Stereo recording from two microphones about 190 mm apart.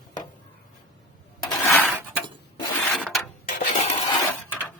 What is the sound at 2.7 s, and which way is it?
Rub, 5° left (ahead or behind).